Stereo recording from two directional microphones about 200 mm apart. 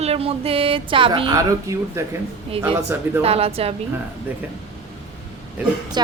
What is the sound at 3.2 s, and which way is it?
Speech, 30° right (ahead or behind).